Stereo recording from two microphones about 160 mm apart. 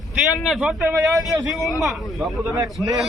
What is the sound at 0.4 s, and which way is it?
Speech, centre (ahead or behind).